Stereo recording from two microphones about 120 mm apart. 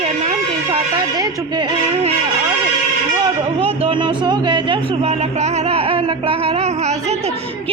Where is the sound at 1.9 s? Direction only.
60° right (ahead or behind).